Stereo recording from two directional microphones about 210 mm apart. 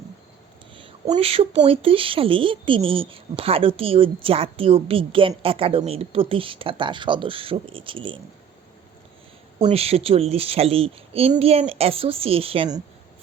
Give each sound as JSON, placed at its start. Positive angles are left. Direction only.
{"t": 0.8, "sound": "speech", "side_deg": -20}
{"t": 9.6, "sound": "speech", "side_deg": -30}